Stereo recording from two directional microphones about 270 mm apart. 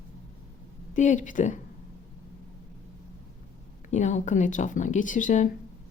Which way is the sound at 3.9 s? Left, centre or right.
Left.